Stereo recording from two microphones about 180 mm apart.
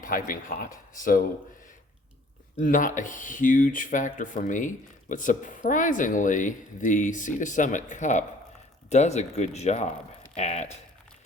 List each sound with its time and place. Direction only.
0.0 s speech: 50° left (ahead or behind)
2.6 s speech: 45° left (ahead or behind)